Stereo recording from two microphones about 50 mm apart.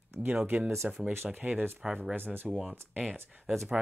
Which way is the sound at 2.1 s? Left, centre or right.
Right.